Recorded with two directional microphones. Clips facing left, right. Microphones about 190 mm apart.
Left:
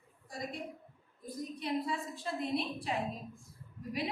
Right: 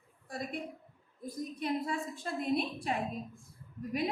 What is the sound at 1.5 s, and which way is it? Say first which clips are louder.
Speech: right 1 dB; 50° right (ahead or behind).